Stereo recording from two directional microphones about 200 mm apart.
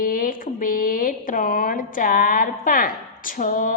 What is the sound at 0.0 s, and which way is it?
A woman's voice, 45° left (ahead or behind).